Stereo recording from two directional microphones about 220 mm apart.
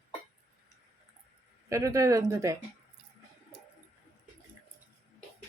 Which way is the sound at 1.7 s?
15° right (ahead or behind).